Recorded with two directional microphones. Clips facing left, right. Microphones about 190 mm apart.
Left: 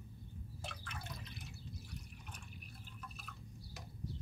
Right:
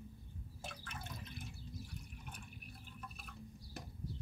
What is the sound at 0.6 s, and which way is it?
Drip, 50° right (ahead or behind).